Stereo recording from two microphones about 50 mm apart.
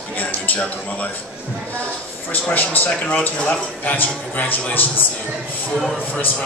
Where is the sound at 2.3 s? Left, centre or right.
Left.